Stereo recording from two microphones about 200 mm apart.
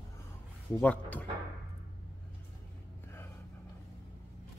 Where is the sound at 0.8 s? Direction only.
5° left (ahead or behind).